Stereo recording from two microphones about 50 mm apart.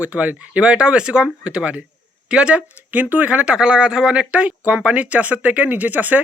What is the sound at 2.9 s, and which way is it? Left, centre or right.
Speech, right.